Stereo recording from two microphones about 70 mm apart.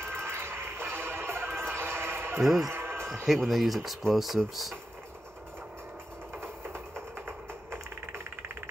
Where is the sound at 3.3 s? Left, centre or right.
Centre.